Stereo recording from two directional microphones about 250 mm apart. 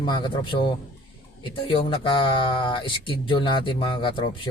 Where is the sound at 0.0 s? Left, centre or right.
Centre.